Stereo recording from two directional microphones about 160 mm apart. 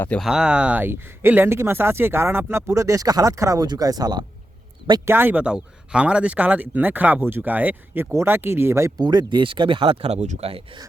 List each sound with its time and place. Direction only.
0.2 s speech: 5° right (ahead or behind); by 5.1 s 25° right (ahead or behind)
5.1 s speech: 10° right (ahead or behind); by 10.6 s 40° right (ahead or behind)